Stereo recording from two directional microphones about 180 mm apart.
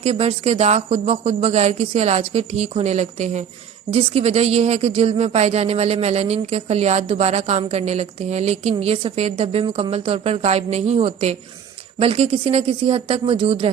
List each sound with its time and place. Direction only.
0.0 s speech: 35° right (ahead or behind)